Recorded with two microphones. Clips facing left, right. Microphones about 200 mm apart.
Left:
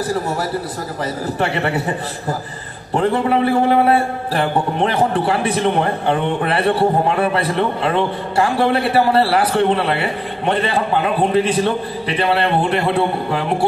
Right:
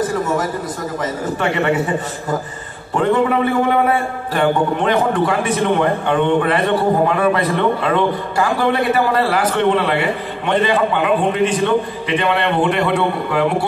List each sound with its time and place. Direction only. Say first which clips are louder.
0.0 s a man's voice: right 2 dB; 35° left (ahead or behind)
2.9 s a man's voice: right 1 dB; 35° left (ahead or behind)